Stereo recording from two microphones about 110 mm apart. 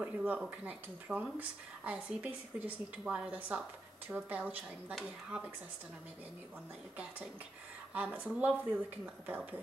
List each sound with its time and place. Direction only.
0.0 s a woman's voice: 15° right (ahead or behind)
7.9 s a woman's voice: 15° right (ahead or behind)